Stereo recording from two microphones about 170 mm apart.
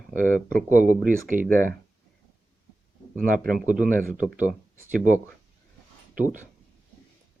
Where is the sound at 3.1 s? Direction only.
55° right (ahead or behind).